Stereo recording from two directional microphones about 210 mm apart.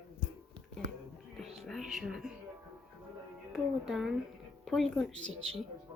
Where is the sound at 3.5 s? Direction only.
Centre (ahead or behind).